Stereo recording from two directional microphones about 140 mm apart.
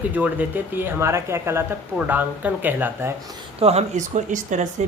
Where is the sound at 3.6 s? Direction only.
50° right (ahead or behind); by 4.6 s 65° right (ahead or behind).